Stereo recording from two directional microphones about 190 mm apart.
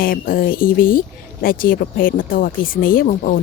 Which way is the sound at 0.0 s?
50° left (ahead or behind).